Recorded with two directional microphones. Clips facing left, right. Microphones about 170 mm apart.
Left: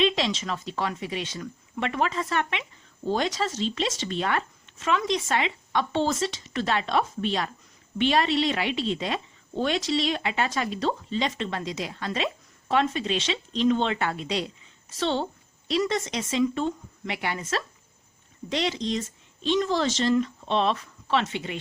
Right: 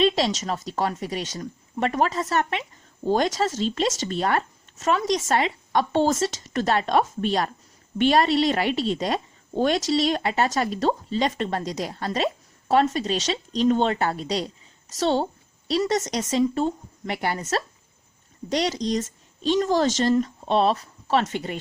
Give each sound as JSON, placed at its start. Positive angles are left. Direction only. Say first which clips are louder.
{"t": 0.0, "sound": "a woman's voice", "louder": "right 3 dB", "side_deg": -40}